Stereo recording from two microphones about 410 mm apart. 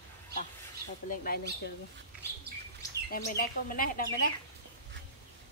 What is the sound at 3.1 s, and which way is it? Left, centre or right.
Speech, left.